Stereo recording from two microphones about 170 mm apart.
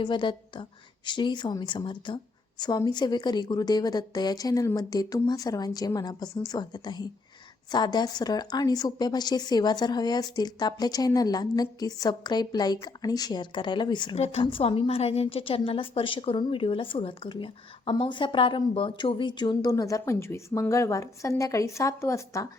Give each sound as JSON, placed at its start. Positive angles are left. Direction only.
{"t": 0.0, "sound": "a woman's voice", "side_deg": 30}